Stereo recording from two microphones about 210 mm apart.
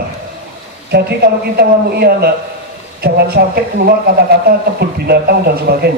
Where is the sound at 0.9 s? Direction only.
50° right (ahead or behind).